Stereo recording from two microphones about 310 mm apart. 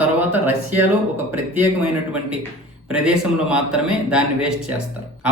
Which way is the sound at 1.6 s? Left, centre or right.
Centre.